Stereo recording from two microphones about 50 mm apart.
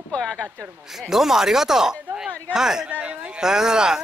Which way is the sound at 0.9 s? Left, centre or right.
Centre.